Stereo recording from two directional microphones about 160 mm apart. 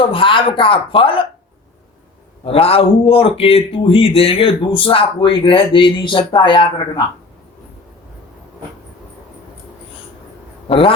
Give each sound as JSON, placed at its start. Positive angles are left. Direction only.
{"t": 0.0, "sound": "a man's voice", "side_deg": 30}
{"t": 2.4, "sound": "a man's voice", "side_deg": 35}
{"t": 10.7, "sound": "a man's voice", "side_deg": 35}